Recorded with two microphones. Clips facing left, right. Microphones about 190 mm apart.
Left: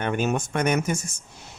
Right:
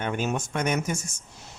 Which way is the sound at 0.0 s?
55° left (ahead or behind).